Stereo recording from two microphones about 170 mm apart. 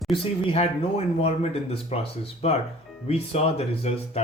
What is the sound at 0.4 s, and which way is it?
Speech, 35° left (ahead or behind).